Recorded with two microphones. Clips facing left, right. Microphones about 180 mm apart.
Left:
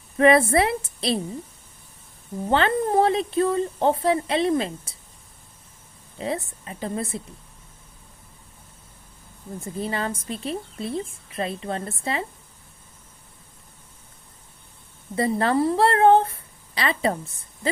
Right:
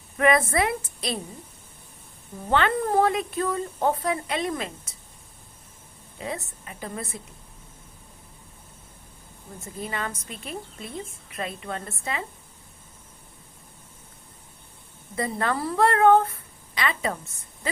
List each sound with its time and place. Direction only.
0.2 s a woman's voice: 30° left (ahead or behind)
2.5 s a woman's voice: 30° left (ahead or behind)
6.1 s a woman's voice: 30° left (ahead or behind)
9.8 s a woman's voice: 30° left (ahead or behind)
15.1 s a woman's voice: 30° left (ahead or behind)